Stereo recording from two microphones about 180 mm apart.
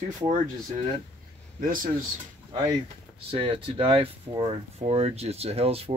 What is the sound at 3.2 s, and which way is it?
Speech, 30° right (ahead or behind).